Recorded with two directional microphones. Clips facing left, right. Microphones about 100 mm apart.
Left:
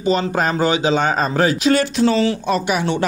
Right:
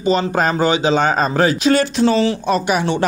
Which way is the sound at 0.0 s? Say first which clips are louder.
Right 2 dB; 30° right (ahead or behind).